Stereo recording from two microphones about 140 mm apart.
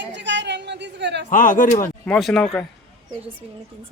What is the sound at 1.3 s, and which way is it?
Speech, 70° left (ahead or behind).